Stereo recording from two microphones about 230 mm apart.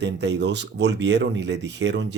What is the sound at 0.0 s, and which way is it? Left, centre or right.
Speech, right.